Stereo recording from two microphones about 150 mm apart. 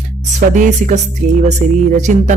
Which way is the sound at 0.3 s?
55° right (ahead or behind).